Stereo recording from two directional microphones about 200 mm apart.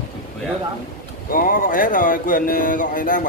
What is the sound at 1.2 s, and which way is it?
Speech, 45° left (ahead or behind).